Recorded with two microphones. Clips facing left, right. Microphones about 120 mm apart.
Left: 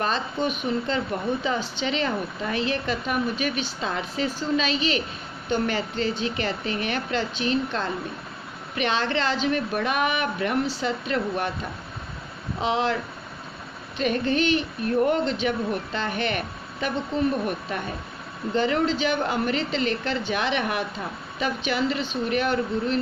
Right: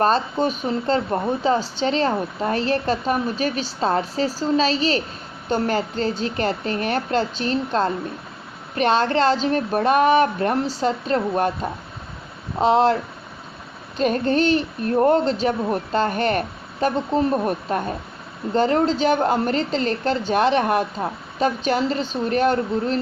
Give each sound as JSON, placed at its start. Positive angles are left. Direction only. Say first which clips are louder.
{"t": 0.0, "sound": "a woman's voice", "louder": "right 6 dB", "side_deg": -40}